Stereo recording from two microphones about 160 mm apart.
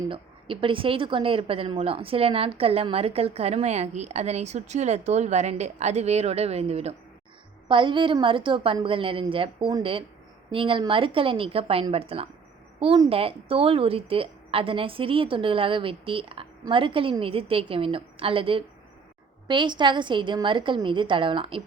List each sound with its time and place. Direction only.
0.1 s a woman's voice: 35° right (ahead or behind)